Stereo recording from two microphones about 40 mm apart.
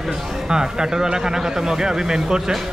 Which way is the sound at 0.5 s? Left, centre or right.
Centre.